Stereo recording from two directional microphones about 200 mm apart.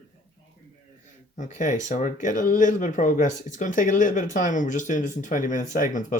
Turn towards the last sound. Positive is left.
turn(degrees=40)  # may be behind; listen again after turning